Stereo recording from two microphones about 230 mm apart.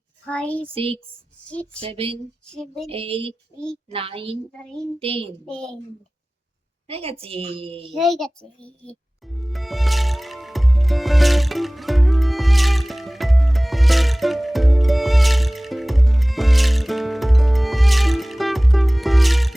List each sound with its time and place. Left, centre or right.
0.3 s speech: centre
0.7 s a woman's voice: right
1.5 s speech: centre
1.8 s a woman's voice: right
2.5 s speech: centre
2.9 s a woman's voice: right
5.5 s speech: centre
6.8 s a woman's voice: right
7.9 s music: centre